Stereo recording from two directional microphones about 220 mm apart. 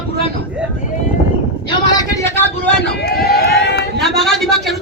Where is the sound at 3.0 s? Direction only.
45° left (ahead or behind).